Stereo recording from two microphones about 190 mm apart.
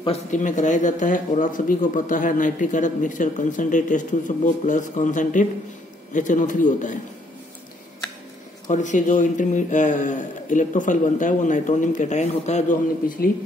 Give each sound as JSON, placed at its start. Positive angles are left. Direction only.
{"t": 0.0, "sound": "a man's voice", "side_deg": 35}
{"t": 8.6, "sound": "a man's voice", "side_deg": 40}